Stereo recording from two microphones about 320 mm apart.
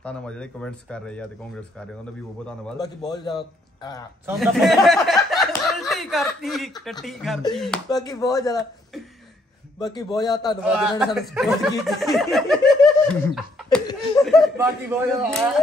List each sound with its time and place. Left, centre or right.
0.0 s a man's voice: centre
4.3 s a sound: centre
6.8 s speech: centre
7.9 s a man's voice: centre
8.9 s a sound: centre
9.8 s a man's voice: centre
10.6 s speech: centre